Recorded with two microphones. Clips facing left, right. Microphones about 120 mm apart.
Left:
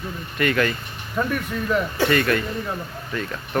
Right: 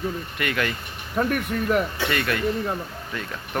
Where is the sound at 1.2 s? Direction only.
55° right (ahead or behind).